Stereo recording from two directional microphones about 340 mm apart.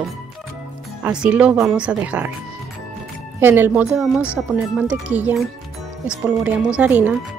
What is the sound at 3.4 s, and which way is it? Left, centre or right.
Speech, centre.